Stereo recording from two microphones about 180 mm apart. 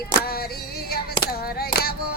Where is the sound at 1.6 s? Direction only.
60° left (ahead or behind).